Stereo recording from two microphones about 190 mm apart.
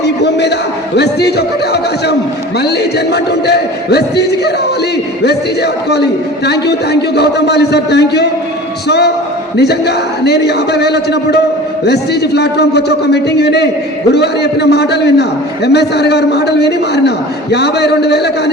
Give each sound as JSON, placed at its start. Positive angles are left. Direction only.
{"t": 0.0, "sound": "a man's voice", "side_deg": 65}